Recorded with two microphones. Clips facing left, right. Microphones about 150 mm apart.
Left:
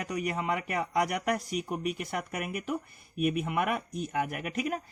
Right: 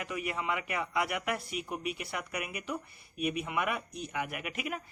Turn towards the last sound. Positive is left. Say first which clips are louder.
# left 5 dB
turn(degrees=40)  # may be behind; listen again after turning